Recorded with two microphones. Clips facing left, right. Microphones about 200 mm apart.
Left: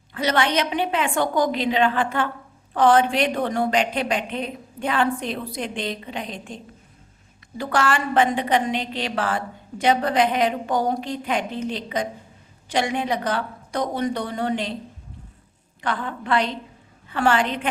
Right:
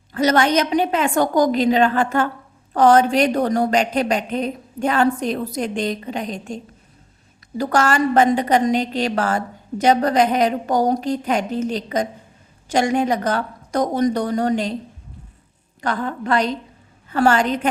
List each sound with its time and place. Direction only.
0.1 s a woman's voice: 45° right (ahead or behind)
7.6 s a woman's voice: 40° right (ahead or behind)
15.8 s a woman's voice: 40° right (ahead or behind)